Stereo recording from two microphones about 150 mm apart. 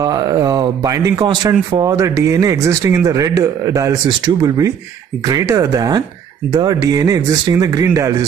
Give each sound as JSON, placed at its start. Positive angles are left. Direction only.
{"t": 0.0, "sound": "speech", "side_deg": -25}